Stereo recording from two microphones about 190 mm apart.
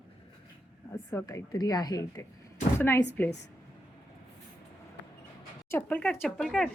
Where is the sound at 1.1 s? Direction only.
15° left (ahead or behind).